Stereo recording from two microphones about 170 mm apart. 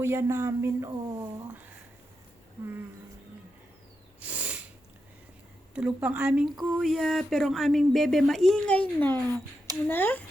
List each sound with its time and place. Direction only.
0.0 s speech: 15° right (ahead or behind)
4.2 s a sound: 10° right (ahead or behind)
5.7 s speech: 5° right (ahead or behind); by 10.2 s 10° left (ahead or behind)